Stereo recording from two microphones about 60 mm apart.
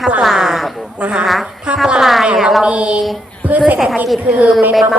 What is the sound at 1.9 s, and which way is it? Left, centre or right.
Speech, centre.